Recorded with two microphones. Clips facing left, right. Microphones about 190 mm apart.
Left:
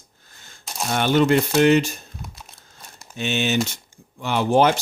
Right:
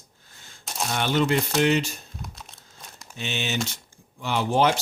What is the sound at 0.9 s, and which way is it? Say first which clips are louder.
Speech: left 6 dB; 55° left (ahead or behind).